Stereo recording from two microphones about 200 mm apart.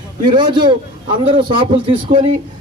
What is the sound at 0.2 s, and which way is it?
A man's voice, 25° right (ahead or behind).